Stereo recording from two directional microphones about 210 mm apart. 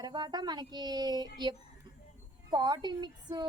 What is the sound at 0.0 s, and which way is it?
A woman's voice, 20° right (ahead or behind).